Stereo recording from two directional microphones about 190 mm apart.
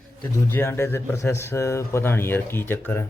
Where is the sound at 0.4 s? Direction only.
10° left (ahead or behind).